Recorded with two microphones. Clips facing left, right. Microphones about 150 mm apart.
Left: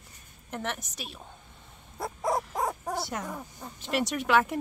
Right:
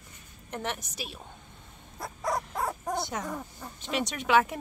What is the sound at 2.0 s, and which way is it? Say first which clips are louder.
Dog: left 3 dB; 25° left (ahead or behind).